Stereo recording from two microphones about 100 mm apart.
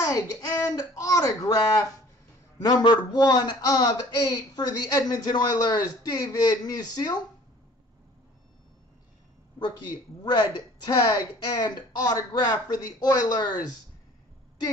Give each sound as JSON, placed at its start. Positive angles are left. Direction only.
{"t": 0.1, "sound": "speech", "side_deg": 35}
{"t": 3.1, "sound": "speech", "side_deg": 45}
{"t": 9.6, "sound": "speech", "side_deg": 45}